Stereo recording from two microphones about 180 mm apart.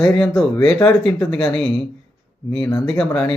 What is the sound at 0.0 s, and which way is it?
Speech, centre (ahead or behind).